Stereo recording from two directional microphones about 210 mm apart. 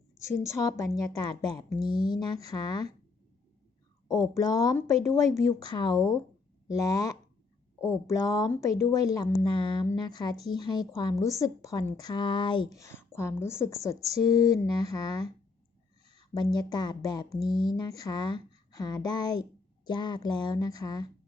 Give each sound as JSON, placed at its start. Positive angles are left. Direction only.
{"t": 0.4, "sound": "a woman's voice", "side_deg": 15}
{"t": 4.1, "sound": "a woman's voice", "side_deg": 15}
{"t": 16.3, "sound": "a woman's voice", "side_deg": 20}
{"t": 17.4, "sound": "speech", "side_deg": 0}
{"t": 17.7, "sound": "a woman's voice", "side_deg": 20}